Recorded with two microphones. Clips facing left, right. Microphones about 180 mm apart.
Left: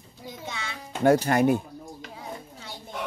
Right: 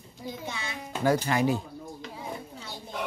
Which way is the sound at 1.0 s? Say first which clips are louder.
Left 5 dB; 55° left (ahead or behind).